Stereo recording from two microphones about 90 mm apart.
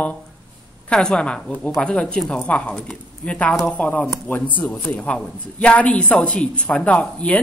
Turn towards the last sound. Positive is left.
turn(degrees=15)  # may be behind; listen again after turning